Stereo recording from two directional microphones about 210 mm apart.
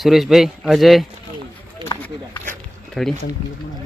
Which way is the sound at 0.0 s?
Centre (ahead or behind).